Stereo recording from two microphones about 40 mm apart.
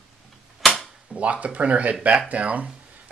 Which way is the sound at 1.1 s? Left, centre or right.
Right.